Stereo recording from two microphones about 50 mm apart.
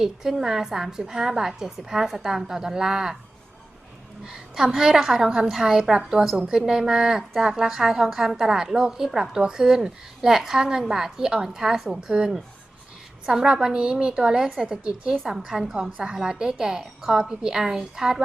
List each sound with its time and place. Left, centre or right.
0.0 s a woman's voice: centre
4.3 s a woman's voice: centre